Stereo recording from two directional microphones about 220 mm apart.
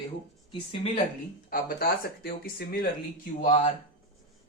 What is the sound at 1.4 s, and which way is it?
Speech, 40° left (ahead or behind).